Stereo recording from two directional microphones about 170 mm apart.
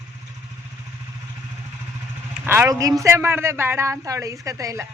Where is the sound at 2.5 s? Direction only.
15° right (ahead or behind).